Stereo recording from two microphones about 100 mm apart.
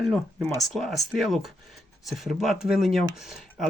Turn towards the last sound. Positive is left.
turn(degrees=-5)  # may be behind; listen again after turning